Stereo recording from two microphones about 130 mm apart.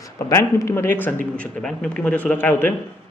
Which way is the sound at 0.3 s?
20° left (ahead or behind).